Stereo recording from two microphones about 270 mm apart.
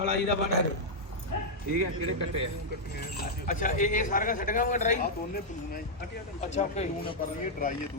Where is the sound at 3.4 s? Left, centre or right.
Left.